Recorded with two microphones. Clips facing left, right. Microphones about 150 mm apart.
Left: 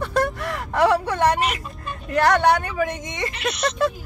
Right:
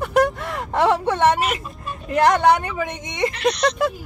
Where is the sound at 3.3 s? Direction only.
5° left (ahead or behind).